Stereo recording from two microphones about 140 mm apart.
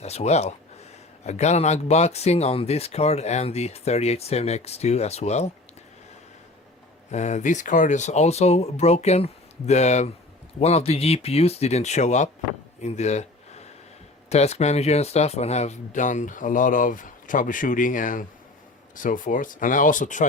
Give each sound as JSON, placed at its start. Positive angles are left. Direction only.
{"t": 0.0, "sound": "speech", "side_deg": 50}
{"t": 7.1, "sound": "speech", "side_deg": 55}
{"t": 12.8, "sound": "a sound", "side_deg": 55}
{"t": 14.3, "sound": "speech", "side_deg": 50}